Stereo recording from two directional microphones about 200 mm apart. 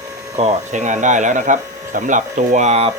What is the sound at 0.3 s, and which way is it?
Speech, 35° right (ahead or behind).